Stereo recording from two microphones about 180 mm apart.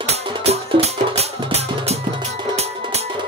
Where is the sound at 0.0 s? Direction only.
35° right (ahead or behind).